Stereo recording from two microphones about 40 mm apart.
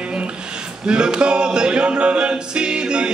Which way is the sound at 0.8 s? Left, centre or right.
Right.